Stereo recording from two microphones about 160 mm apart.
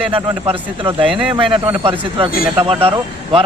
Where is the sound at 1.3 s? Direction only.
30° right (ahead or behind).